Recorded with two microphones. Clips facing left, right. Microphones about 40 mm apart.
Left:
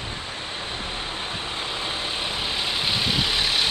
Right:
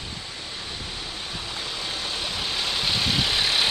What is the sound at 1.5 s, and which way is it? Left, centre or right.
Vehicle, left.